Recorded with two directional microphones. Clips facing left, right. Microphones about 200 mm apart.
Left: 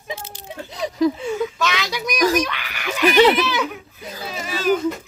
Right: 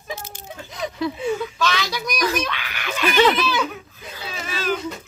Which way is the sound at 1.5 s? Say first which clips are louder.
Even; 20° left (ahead or behind).